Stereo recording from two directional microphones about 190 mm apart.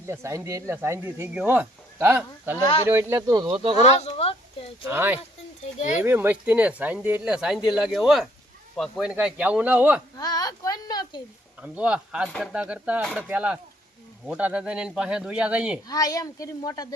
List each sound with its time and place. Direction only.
0.0 s speech: 15° right (ahead or behind); by 3.8 s 30° right (ahead or behind)
3.8 s speech: 35° left (ahead or behind)
4.9 s speech: 10° right (ahead or behind)
10.2 s speech: 20° left (ahead or behind)
11.6 s speech: 5° right (ahead or behind)
15.9 s speech: 20° left (ahead or behind)